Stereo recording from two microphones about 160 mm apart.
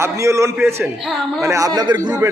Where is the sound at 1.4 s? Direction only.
20° right (ahead or behind).